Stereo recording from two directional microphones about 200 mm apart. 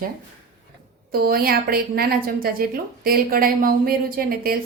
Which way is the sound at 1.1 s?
50° right (ahead or behind).